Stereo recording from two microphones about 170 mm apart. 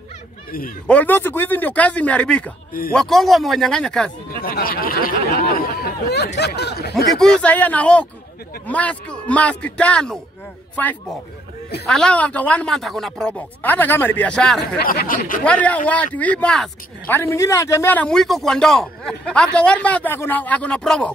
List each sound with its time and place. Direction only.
0.8 s speech: 10° left (ahead or behind)
4.3 s speech: 60° left (ahead or behind)
7.1 s speech: 5° left (ahead or behind)
11.9 s speech: 5° left (ahead or behind)
14.8 s speech: 60° left (ahead or behind)
15.4 s speech: 10° left (ahead or behind)